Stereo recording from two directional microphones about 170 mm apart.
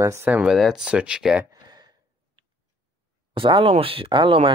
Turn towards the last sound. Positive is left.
turn(degrees=-30)  # may be behind; listen again after turning